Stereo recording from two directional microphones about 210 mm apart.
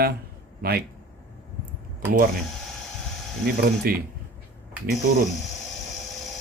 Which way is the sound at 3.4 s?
45° right (ahead or behind).